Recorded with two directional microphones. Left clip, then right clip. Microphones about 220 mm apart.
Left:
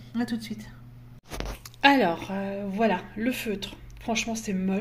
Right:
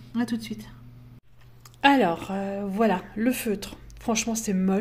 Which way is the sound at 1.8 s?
15° right (ahead or behind).